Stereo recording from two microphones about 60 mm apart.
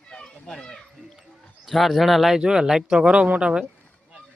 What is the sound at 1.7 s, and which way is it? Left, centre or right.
Speech, centre.